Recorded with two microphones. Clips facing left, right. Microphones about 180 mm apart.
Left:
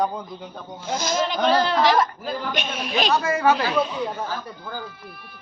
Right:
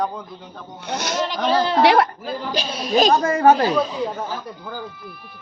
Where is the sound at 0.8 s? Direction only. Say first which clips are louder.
Even; 70° right (ahead or behind).